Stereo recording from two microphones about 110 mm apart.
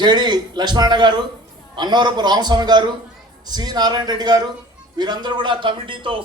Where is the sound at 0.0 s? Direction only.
40° right (ahead or behind).